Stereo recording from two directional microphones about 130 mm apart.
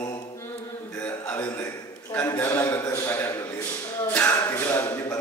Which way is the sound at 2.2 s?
25° left (ahead or behind).